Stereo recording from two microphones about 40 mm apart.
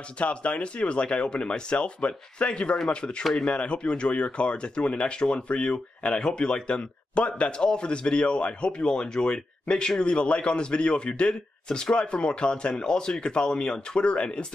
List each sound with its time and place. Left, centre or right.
0.2 s speech: left